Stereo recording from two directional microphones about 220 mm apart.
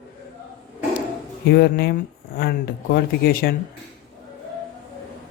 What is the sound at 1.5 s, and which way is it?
Speech, 45° left (ahead or behind).